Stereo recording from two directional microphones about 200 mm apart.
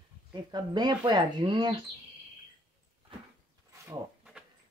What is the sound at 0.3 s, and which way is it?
Speech, 20° right (ahead or behind).